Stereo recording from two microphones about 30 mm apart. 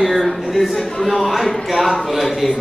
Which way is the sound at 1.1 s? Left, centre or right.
Centre.